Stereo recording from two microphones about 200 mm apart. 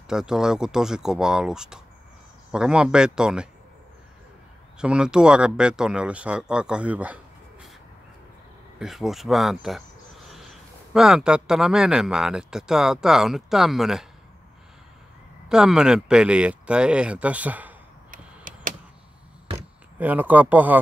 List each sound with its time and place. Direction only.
0.1 s speech: 5° right (ahead or behind)
4.7 s speech: 5° right (ahead or behind)
8.7 s speech: centre (ahead or behind)
15.4 s speech: 5° right (ahead or behind)
18.1 s power windows: 40° right (ahead or behind)
20.0 s speech: 10° right (ahead or behind)